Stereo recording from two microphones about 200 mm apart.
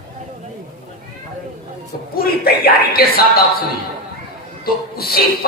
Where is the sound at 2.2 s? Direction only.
50° left (ahead or behind).